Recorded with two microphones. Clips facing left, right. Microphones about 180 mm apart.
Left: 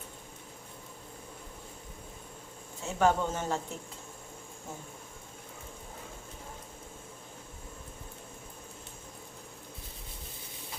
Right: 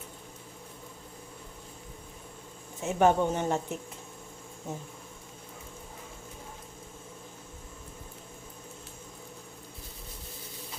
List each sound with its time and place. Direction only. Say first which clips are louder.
2.8 s speech: right 3 dB; 20° right (ahead or behind)